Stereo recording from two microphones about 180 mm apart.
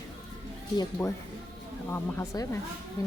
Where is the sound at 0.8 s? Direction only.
15° left (ahead or behind).